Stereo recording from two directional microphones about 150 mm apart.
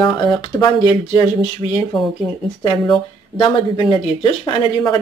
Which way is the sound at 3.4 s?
35° left (ahead or behind).